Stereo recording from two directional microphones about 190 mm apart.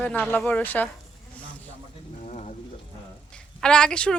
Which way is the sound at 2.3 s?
35° left (ahead or behind).